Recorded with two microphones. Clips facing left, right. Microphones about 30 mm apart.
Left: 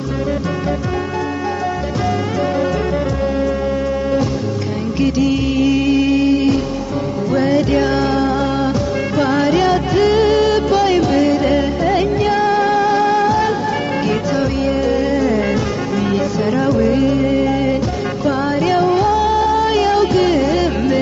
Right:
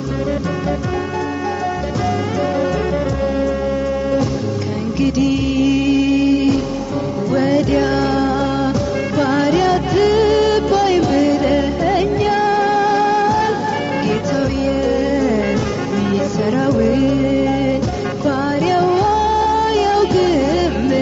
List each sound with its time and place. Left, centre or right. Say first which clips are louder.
5.6 s music: even; centre
14.9 s music: even; centre
16.5 s music: even; centre
20.4 s music: even; centre